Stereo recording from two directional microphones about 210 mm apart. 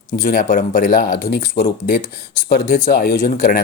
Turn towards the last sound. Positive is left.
turn(degrees=40)  # may be behind; listen again after turning